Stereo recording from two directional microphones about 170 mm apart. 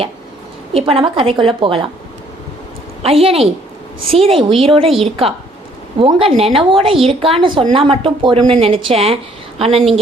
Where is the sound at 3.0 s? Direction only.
35° right (ahead or behind).